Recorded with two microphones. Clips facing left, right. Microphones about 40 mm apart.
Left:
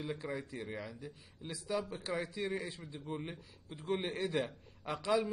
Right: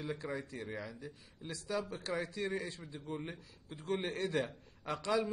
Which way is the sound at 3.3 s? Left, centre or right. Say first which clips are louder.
Even; centre.